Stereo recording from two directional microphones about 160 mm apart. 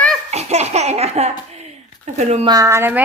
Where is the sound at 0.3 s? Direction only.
45° right (ahead or behind).